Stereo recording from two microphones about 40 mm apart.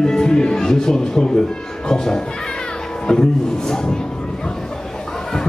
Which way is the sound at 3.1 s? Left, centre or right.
Centre.